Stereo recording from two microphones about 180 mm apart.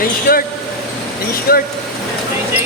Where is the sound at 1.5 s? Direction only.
55° left (ahead or behind).